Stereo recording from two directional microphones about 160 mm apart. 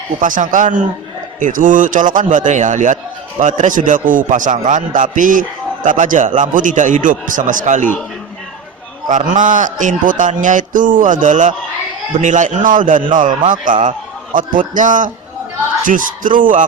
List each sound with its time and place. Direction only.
0.2 s a man's voice: 55° right (ahead or behind)
9.0 s a man's voice: 50° right (ahead or behind)